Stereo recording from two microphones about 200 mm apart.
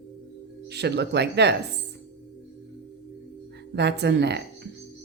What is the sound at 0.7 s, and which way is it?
Speech, 55° right (ahead or behind).